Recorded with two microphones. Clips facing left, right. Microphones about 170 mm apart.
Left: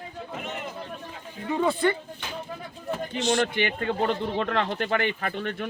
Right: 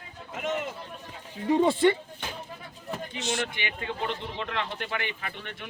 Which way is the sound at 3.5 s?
50° left (ahead or behind).